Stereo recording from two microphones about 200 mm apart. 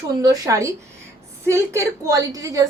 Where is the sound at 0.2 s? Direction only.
15° right (ahead or behind).